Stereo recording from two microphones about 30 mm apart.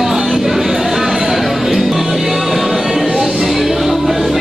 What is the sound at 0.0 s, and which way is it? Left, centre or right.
Music, centre.